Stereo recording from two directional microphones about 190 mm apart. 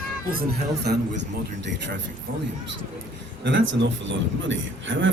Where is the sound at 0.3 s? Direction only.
55° right (ahead or behind).